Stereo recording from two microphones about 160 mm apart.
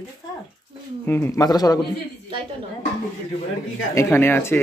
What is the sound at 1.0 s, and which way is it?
Speech, 15° left (ahead or behind).